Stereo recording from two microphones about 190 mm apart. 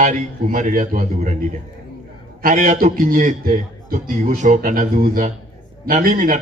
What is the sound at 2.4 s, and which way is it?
A man's voice, 45° right (ahead or behind).